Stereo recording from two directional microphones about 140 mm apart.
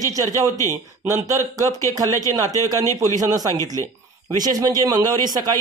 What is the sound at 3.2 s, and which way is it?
Speech, 25° right (ahead or behind).